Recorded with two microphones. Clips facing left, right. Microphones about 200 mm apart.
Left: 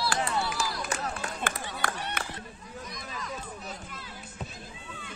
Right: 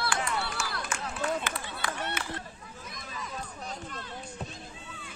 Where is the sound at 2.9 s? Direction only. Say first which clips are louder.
Right 1 dB; centre (ahead or behind).